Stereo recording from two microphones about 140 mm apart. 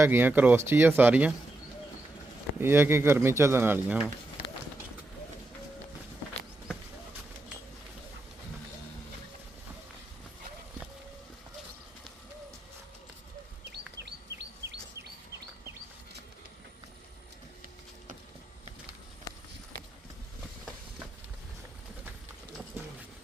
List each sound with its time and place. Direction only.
0.0 s speech: 15° right (ahead or behind)
2.6 s speech: 15° right (ahead or behind)